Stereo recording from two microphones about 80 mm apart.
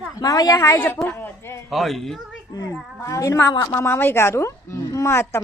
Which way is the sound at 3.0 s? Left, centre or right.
Left.